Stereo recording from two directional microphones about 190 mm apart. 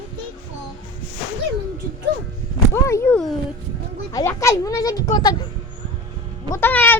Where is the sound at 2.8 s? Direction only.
15° left (ahead or behind).